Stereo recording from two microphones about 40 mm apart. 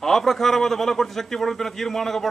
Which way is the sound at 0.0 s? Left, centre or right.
Centre.